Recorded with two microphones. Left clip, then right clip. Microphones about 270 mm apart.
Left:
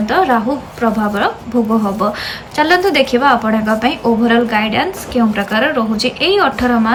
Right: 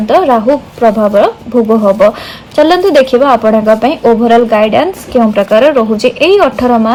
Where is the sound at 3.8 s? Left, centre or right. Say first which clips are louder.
Right 6 dB; centre.